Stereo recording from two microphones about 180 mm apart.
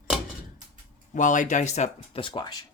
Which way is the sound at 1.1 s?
45° left (ahead or behind).